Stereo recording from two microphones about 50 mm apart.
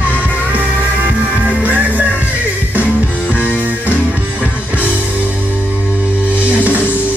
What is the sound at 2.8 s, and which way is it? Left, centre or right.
Music, left.